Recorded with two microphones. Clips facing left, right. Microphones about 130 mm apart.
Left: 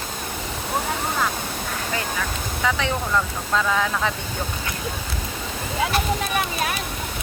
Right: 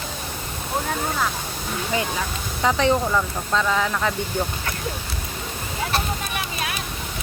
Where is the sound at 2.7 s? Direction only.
35° right (ahead or behind).